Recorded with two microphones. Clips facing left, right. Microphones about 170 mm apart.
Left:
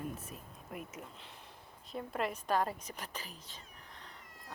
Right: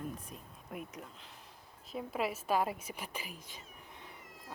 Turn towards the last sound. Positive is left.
turn(degrees=-10)  # may be behind; listen again after turning